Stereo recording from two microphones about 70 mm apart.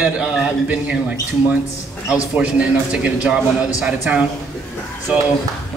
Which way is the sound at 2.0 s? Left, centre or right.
Centre.